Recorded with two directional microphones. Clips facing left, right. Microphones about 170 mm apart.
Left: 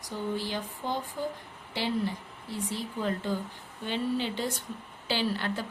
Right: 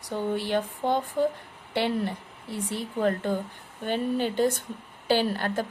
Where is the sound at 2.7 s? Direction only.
60° right (ahead or behind).